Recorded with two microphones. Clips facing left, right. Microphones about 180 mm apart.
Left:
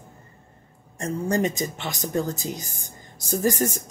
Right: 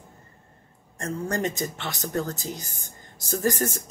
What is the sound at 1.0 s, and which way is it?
Speech, 15° left (ahead or behind).